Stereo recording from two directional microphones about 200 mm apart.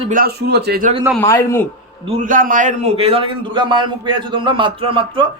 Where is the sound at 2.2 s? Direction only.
45° right (ahead or behind); by 5.2 s 25° right (ahead or behind).